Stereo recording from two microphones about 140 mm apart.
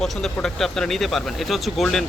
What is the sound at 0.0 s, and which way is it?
Speech, 5° left (ahead or behind).